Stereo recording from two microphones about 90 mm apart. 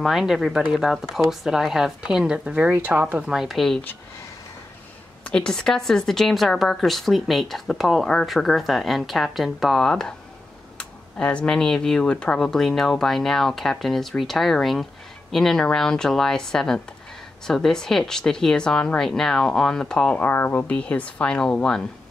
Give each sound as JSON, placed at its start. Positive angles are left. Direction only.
{"t": 0.0, "sound": "speech", "side_deg": -5}
{"t": 3.3, "sound": "speech", "side_deg": 0}
{"t": 5.2, "sound": "speech", "side_deg": 10}
{"t": 20.2, "sound": "speech", "side_deg": 20}